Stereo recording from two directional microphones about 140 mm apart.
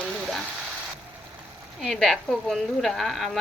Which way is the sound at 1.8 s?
Centre (ahead or behind).